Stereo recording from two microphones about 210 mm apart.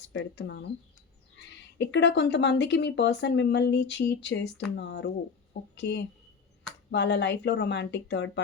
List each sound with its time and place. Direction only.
0.1 s speech: 60° left (ahead or behind)